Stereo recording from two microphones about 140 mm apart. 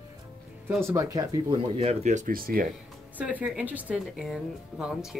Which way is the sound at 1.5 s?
45° right (ahead or behind).